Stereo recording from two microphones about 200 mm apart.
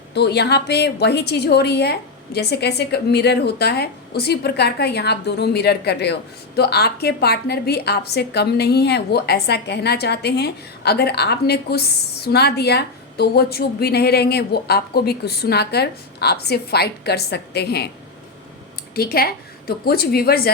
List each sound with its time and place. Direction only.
0.1 s a woman's voice: 55° left (ahead or behind)
18.9 s a woman's voice: 50° left (ahead or behind)